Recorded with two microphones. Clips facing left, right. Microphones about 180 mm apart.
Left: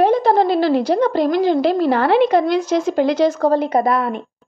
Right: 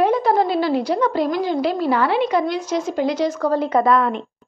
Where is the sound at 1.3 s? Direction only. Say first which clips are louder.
Left 5 dB; 70° left (ahead or behind).